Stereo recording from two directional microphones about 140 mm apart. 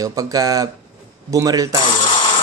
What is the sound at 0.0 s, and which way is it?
Speech, 25° right (ahead or behind).